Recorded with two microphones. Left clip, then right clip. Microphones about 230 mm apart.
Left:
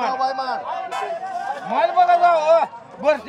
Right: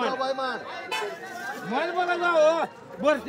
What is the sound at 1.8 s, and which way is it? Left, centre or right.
Speech, centre.